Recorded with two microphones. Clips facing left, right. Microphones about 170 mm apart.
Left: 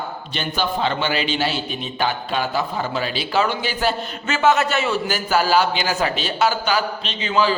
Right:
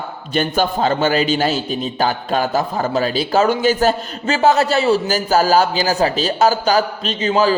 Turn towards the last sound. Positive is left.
turn(degrees=-40)  # may be behind; listen again after turning